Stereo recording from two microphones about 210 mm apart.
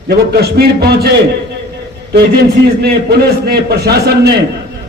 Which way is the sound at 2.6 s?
50° right (ahead or behind).